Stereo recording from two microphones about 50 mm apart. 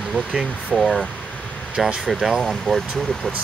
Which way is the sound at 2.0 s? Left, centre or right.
Centre.